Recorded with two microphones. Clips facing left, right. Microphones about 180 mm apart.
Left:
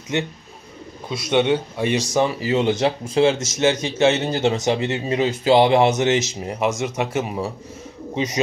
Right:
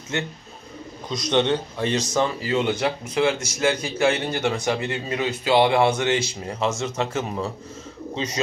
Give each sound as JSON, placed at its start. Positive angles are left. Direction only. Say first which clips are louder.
{"t": 0.1, "sound": "a man's voice", "louder": "left 4 dB", "side_deg": 20}
{"t": 1.0, "sound": "a man's voice", "louder": "left 2 dB", "side_deg": 5}